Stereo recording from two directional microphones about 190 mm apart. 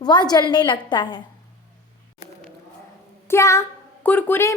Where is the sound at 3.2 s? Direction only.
15° left (ahead or behind).